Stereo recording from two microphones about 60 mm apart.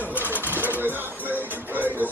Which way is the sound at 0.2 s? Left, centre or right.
Right.